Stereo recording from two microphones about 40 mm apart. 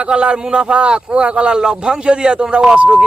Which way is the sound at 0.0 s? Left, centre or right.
Right.